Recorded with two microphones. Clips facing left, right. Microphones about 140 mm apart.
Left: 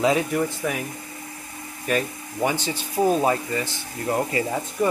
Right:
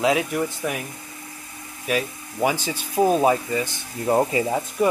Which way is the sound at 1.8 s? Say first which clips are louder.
Even; 10° right (ahead or behind).